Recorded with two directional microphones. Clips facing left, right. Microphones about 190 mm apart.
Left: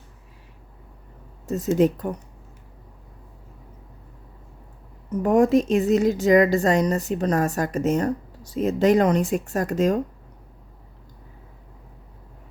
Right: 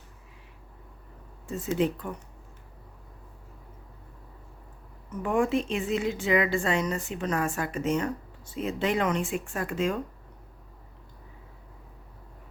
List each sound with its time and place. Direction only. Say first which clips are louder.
1.5 s a woman's voice: left 7 dB; 40° left (ahead or behind)
5.0 s a woman's voice: left 8 dB; 40° left (ahead or behind)